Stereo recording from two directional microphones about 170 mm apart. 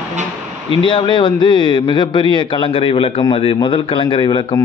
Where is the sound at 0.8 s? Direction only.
30° left (ahead or behind).